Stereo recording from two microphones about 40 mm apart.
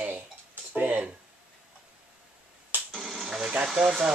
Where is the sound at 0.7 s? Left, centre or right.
Right.